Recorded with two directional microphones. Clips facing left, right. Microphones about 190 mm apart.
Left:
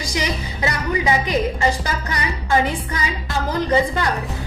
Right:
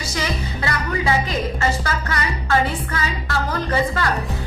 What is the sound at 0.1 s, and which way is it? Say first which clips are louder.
A woman's voice: even; 15° left (ahead or behind).